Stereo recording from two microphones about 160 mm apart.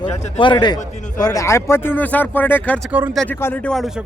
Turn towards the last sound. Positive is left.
turn(degrees=0)  # may be behind; listen again after turning